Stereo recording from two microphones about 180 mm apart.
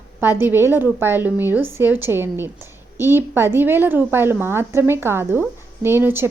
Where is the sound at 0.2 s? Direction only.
10° right (ahead or behind).